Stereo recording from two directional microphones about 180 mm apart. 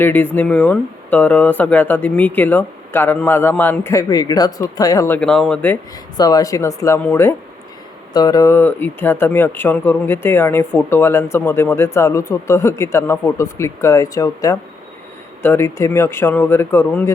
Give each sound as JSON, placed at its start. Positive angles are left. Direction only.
{"t": 0.0, "sound": "speech", "side_deg": 10}
{"t": 6.1, "sound": "speech", "side_deg": 20}
{"t": 8.1, "sound": "speech", "side_deg": 20}